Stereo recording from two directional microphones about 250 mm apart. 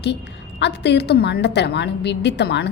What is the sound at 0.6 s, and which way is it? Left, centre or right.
A woman's voice, left.